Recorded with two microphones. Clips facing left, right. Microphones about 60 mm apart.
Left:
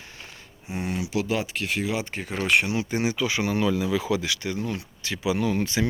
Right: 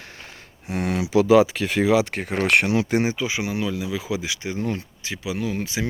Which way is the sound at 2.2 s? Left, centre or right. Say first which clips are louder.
Right 3 dB; right.